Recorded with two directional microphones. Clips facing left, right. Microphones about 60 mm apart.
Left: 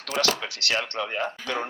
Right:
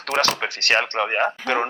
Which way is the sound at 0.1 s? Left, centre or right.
Right.